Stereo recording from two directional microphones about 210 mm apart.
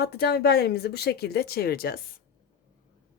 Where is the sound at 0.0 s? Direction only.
50° left (ahead or behind).